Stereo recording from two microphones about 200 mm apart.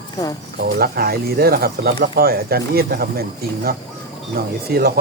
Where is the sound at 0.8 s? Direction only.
50° right (ahead or behind).